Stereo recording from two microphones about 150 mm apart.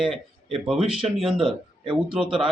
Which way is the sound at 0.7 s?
40° right (ahead or behind).